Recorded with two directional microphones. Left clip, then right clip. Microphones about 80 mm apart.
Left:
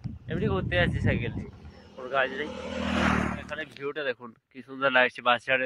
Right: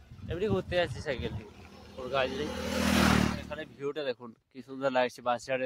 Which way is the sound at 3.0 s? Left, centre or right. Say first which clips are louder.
Left 3 dB; left.